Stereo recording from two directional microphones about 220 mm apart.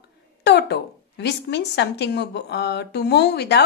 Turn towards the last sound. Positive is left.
turn(degrees=45)  # may be behind; listen again after turning